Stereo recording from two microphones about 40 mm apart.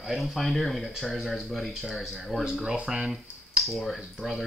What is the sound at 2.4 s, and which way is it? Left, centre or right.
Speech, centre.